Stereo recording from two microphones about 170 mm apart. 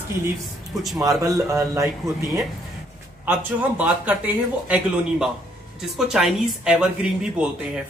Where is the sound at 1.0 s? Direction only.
20° right (ahead or behind).